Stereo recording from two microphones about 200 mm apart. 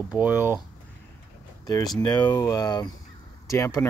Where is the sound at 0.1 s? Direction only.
10° right (ahead or behind).